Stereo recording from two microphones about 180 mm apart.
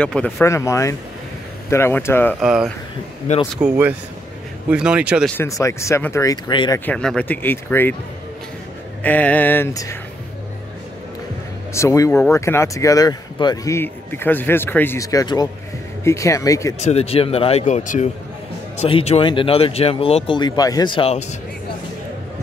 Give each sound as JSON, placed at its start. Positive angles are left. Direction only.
{"t": 0.0, "sound": "speech", "side_deg": 5}
{"t": 2.4, "sound": "speech", "side_deg": -5}
{"t": 5.4, "sound": "speech", "side_deg": 15}
{"t": 6.9, "sound": "speech", "side_deg": 5}
{"t": 9.0, "sound": "speech", "side_deg": 10}
{"t": 11.7, "sound": "speech", "side_deg": 15}
{"t": 16.8, "sound": "speech", "side_deg": 35}